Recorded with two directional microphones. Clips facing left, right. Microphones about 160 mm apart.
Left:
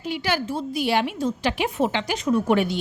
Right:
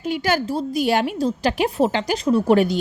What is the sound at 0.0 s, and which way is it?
A woman's voice, 45° right (ahead or behind).